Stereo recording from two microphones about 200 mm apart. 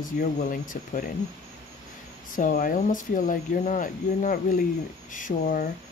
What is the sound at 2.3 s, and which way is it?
Speech, 45° left (ahead or behind).